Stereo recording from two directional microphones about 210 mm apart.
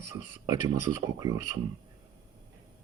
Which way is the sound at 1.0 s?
15° right (ahead or behind).